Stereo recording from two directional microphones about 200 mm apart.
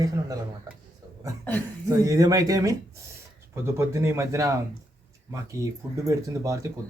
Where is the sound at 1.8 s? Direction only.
15° right (ahead or behind).